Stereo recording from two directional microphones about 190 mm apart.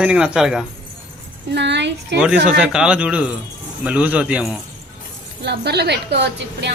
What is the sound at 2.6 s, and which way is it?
A man's voice, 5° right (ahead or behind).